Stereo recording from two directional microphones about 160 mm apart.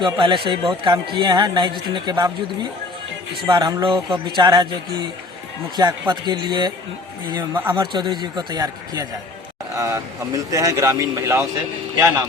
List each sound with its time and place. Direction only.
0.0 s speech: 30° right (ahead or behind)
7.3 s speech: 15° right (ahead or behind)
7.8 s speech: 30° right (ahead or behind)